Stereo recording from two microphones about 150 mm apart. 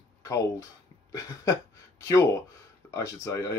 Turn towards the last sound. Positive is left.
turn(degrees=20)  # may be behind; listen again after turning